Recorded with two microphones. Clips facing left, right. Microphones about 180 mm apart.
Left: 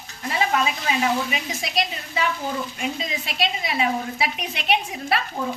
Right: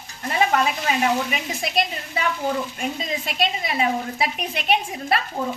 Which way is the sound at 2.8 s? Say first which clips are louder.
Right 1 dB; 50° right (ahead or behind).